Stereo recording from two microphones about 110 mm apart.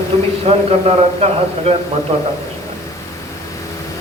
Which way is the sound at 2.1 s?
60° right (ahead or behind).